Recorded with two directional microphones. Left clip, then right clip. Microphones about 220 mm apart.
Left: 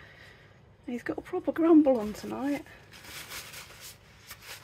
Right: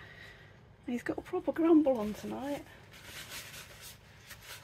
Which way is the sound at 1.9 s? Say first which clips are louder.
Left 5 dB; 30° left (ahead or behind).